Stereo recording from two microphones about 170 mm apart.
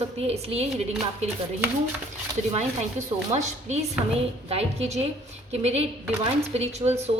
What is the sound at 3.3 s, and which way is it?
A woman's voice, 40° right (ahead or behind).